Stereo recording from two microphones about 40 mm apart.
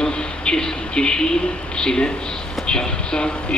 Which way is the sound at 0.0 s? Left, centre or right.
Left.